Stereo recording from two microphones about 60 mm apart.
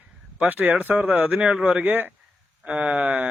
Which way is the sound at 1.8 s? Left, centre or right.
Right.